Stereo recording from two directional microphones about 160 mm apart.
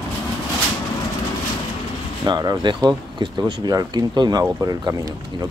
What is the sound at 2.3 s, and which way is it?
Speech, 30° right (ahead or behind).